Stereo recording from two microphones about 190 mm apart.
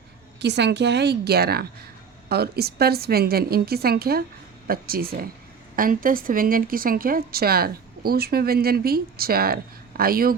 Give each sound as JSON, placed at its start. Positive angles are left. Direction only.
{"t": 0.3, "sound": "a woman's voice", "side_deg": -65}